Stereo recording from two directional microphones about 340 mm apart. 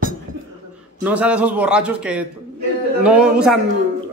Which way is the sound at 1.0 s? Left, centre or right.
Centre.